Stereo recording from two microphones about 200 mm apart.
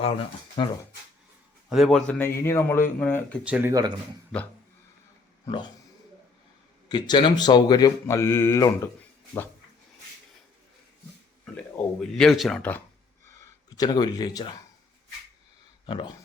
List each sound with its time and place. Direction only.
0.5 s speech: 20° left (ahead or behind)
1.7 s a man's voice: centre (ahead or behind)
3.4 s speech: 10° right (ahead or behind)
5.5 s speech: 25° left (ahead or behind)
6.8 s speech: 20° left (ahead or behind)
11.4 s speech: 5° left (ahead or behind)
13.2 s gasp: 15° left (ahead or behind)
15.9 s speech: 25° left (ahead or behind)